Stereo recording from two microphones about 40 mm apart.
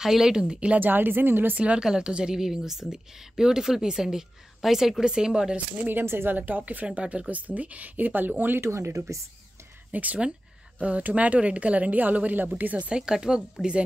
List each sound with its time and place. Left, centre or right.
0.0 s speech: centre
0.7 s speech: right
1.8 s a woman's voice: centre
5.0 s speech: centre
6.2 s speech: right
7.0 s speech: right
7.2 s speech: right
8.5 s speech: right
9.9 s speech: right
12.9 s a woman's voice: centre